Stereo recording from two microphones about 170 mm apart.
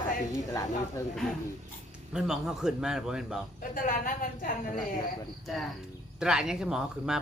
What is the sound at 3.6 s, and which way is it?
A woman's voice, 55° left (ahead or behind).